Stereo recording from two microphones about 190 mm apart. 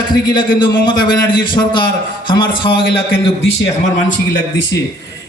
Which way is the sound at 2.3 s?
25° left (ahead or behind).